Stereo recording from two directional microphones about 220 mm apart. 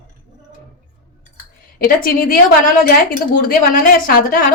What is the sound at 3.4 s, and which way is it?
Speech, 40° left (ahead or behind).